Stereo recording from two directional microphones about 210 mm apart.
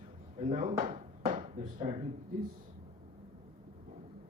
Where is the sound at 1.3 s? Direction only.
35° right (ahead or behind).